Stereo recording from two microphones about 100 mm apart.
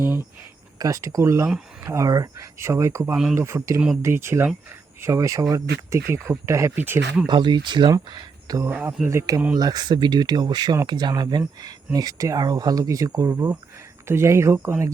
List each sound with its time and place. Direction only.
0.8 s speech: 35° right (ahead or behind); by 7.0 s 20° right (ahead or behind)
7.3 s speech: 50° right (ahead or behind)
8.1 s a sound: 40° right (ahead or behind)
8.7 s speech: 15° right (ahead or behind)
9.0 s speech: 35° right (ahead or behind)
13.3 s speech: 20° right (ahead or behind)